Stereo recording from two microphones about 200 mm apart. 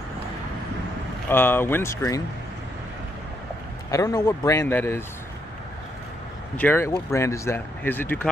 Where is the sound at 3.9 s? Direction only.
15° left (ahead or behind).